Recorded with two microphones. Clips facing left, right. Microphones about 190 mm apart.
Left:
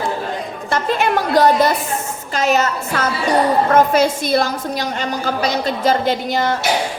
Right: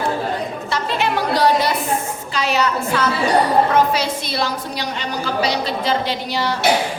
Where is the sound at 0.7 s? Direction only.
50° left (ahead or behind).